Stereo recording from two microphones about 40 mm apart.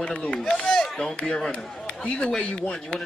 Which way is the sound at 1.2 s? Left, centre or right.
Centre.